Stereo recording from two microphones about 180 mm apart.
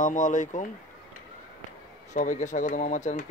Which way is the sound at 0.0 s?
45° left (ahead or behind).